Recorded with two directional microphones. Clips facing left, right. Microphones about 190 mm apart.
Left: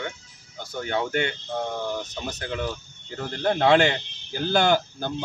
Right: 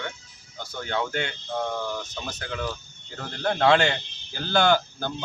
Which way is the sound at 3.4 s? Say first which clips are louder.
Left 2 dB; 5° left (ahead or behind).